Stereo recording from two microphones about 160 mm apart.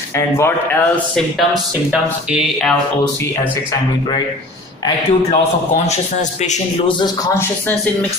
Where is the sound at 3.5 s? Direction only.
20° left (ahead or behind).